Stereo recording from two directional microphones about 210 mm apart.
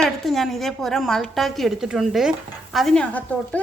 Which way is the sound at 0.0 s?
Centre (ahead or behind).